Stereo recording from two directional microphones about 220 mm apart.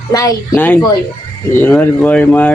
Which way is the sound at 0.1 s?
15° left (ahead or behind).